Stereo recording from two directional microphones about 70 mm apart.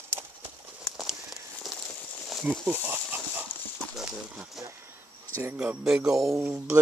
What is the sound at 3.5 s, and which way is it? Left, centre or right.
Clip-clop, left.